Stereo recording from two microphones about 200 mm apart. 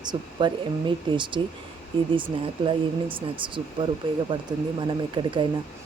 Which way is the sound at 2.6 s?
25° right (ahead or behind).